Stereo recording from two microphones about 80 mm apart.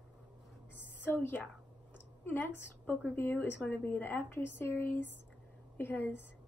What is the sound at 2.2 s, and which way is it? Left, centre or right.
A woman's voice, left.